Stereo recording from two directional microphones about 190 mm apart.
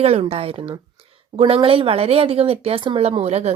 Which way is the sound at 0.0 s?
30° right (ahead or behind).